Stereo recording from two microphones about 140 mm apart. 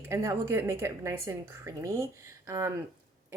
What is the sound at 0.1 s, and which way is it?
A woman's voice, 20° right (ahead or behind).